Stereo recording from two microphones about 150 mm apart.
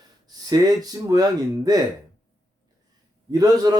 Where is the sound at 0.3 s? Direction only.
25° right (ahead or behind).